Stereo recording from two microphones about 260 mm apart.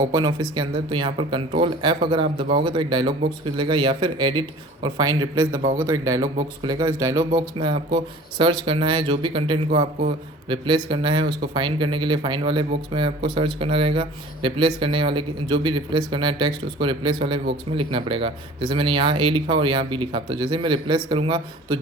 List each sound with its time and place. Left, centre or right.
0.1 s speech: centre